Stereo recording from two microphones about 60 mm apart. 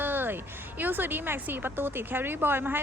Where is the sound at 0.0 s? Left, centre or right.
Right.